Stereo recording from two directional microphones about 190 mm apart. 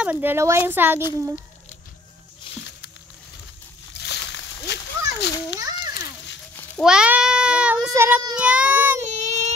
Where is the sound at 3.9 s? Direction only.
65° left (ahead or behind).